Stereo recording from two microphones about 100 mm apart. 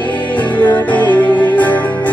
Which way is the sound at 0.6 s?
15° left (ahead or behind).